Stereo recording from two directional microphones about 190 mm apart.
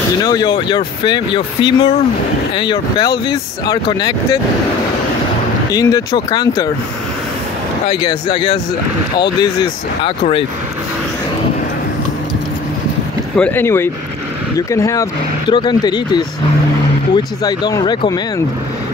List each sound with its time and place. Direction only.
0.2 s speech: 20° left (ahead or behind)
5.7 s speech: 20° left (ahead or behind)
7.9 s speech: 25° left (ahead or behind)
10.0 s speech: 30° left (ahead or behind)
13.4 s speech: 10° left (ahead or behind)